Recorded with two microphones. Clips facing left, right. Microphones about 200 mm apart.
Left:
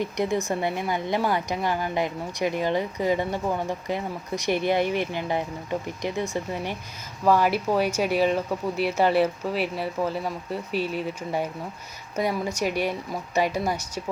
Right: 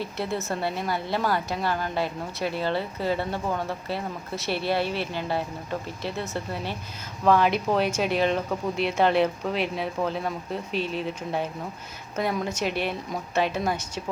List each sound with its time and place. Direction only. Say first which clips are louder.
0.0 s a woman's voice: left 4 dB; 15° left (ahead or behind)